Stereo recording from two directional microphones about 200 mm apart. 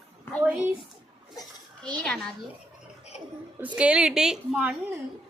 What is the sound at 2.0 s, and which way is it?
Speech, 5° left (ahead or behind).